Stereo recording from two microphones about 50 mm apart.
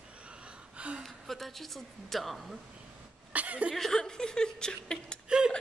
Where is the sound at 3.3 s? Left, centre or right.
Right.